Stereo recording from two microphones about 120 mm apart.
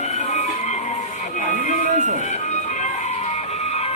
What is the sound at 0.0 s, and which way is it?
Music, 75° left (ahead or behind).